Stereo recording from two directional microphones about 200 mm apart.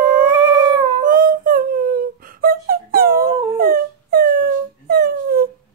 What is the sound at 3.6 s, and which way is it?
Dog, 50° right (ahead or behind).